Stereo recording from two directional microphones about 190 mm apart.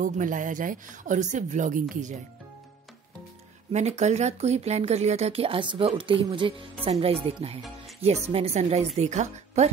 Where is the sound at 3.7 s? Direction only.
35° right (ahead or behind).